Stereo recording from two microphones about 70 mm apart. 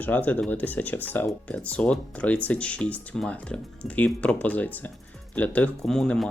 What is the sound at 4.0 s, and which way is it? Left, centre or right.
Speech, left.